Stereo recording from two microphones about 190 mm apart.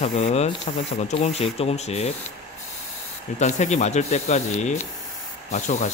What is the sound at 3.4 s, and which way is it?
A man's voice, 40° left (ahead or behind).